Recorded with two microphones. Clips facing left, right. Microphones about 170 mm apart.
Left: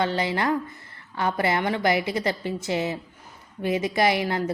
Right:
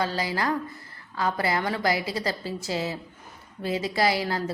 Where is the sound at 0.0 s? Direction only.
25° left (ahead or behind).